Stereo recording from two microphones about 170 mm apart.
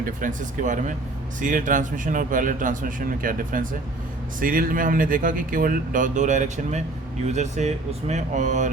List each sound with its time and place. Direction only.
0.2 s speech: 50° right (ahead or behind)